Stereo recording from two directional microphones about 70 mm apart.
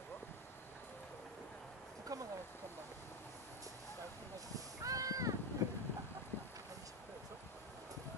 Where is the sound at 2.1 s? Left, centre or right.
Right.